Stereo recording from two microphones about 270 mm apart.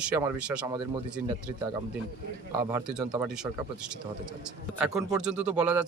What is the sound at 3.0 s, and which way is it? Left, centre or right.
Speech, centre.